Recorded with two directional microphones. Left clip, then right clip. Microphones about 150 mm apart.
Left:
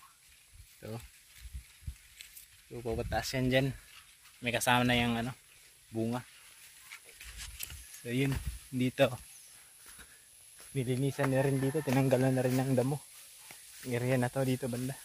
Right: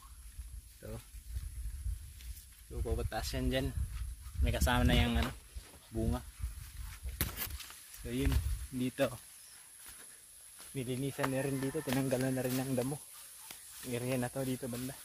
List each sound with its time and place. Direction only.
2.7 s speech: 20° left (ahead or behind)
3.1 s speech: 30° left (ahead or behind)
4.4 s speech: 5° left (ahead or behind)
5.9 s speech: 15° left (ahead or behind)
8.1 s speech: 15° left (ahead or behind)
10.7 s speech: 35° left (ahead or behind)